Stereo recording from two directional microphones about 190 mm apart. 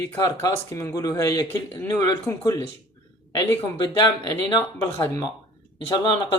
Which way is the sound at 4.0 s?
25° left (ahead or behind).